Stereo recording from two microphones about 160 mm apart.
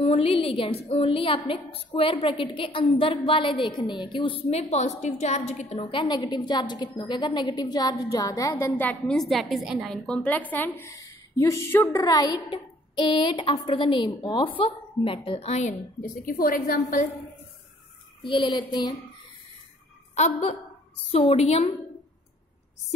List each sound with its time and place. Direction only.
0.0 s a woman's voice: 35° left (ahead or behind)
5.8 s a woman's voice: 30° left (ahead or behind)
16.0 s a woman's voice: 65° left (ahead or behind)
18.2 s a woman's voice: 30° left (ahead or behind)
20.2 s a woman's voice: 40° left (ahead or behind)